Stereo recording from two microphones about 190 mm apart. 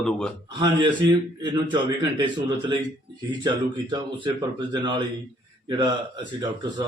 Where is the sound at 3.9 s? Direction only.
25° right (ahead or behind).